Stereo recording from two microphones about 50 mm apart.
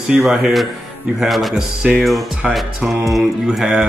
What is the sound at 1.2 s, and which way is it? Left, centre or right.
Speech, centre.